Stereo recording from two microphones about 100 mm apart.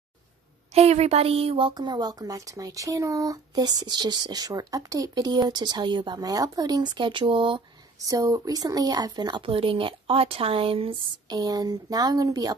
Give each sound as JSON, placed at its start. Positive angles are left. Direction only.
{"t": 0.7, "sound": "speech", "side_deg": -90}
{"t": 1.7, "sound": "speech", "side_deg": -45}
{"t": 8.0, "sound": "speech", "side_deg": -35}
{"t": 9.4, "sound": "speech", "side_deg": -65}
{"t": 11.2, "sound": "speech", "side_deg": -40}